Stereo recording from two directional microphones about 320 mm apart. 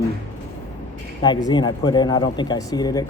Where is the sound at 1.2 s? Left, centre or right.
Centre.